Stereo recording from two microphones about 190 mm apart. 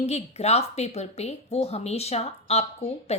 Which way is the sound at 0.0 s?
35° left (ahead or behind).